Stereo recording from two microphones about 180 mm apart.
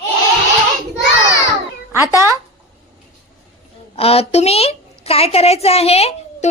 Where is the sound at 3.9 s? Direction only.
35° left (ahead or behind).